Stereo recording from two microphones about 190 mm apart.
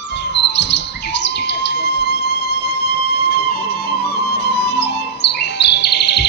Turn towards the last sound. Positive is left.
turn(degrees=60)  # may be behind; listen again after turning